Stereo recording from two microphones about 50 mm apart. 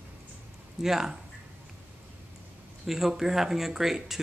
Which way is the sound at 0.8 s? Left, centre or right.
Centre.